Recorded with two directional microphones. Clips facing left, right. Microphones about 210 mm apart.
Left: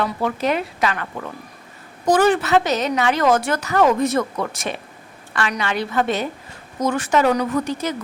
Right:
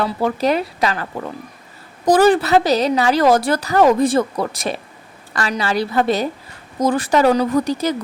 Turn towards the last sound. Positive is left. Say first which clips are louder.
# right 4 dB
turn(degrees=-35)  # may be behind; listen again after turning